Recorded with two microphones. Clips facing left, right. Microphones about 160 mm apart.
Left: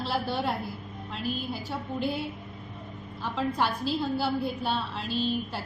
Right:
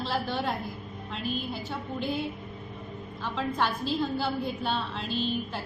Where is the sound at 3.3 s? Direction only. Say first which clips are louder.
Left 1 dB; 10° left (ahead or behind).